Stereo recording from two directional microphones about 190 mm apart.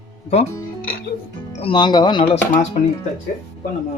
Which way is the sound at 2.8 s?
35° left (ahead or behind).